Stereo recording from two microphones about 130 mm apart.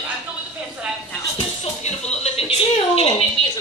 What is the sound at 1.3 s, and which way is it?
Music, 60° left (ahead or behind).